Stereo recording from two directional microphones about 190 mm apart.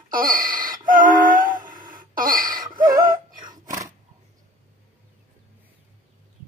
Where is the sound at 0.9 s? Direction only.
45° right (ahead or behind).